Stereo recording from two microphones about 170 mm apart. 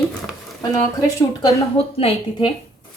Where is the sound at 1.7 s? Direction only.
35° left (ahead or behind).